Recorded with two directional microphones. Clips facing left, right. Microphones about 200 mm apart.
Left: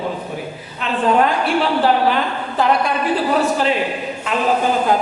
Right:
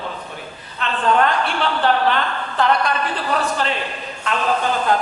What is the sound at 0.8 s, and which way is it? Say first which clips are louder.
A woman's voice: left 2 dB; 10° left (ahead or behind).